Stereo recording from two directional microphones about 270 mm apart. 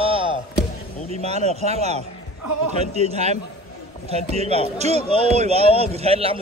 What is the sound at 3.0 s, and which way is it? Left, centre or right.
A man's voice, right.